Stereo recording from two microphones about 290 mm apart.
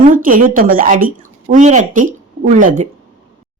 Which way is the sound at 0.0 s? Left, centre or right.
Right.